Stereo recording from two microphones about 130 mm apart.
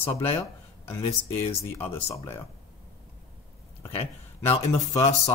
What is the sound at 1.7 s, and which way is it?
Speech, 15° left (ahead or behind).